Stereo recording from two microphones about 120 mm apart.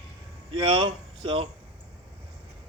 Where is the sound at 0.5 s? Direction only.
45° right (ahead or behind).